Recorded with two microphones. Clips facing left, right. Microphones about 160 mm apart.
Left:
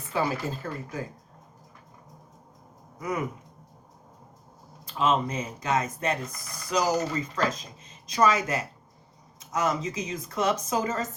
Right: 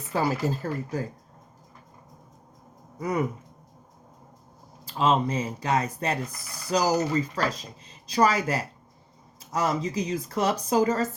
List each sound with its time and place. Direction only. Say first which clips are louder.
0.1 s speech: right 3 dB; 40° right (ahead or behind)
4.9 s speech: right 2 dB; 30° right (ahead or behind)